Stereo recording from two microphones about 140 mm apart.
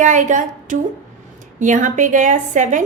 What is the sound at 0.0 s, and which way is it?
A woman's voice, 60° right (ahead or behind).